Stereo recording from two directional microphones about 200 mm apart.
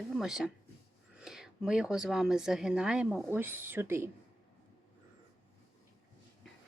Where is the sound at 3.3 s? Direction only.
10° right (ahead or behind).